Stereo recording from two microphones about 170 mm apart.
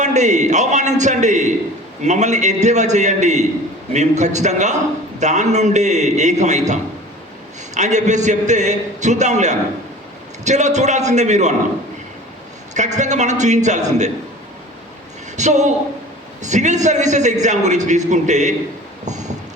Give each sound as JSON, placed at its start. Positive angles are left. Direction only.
{"t": 0.0, "sound": "a man's voice", "side_deg": -45}
{"t": 12.7, "sound": "a man's voice", "side_deg": -45}
{"t": 15.4, "sound": "a man's voice", "side_deg": -45}
{"t": 19.0, "sound": "vehicle", "side_deg": -45}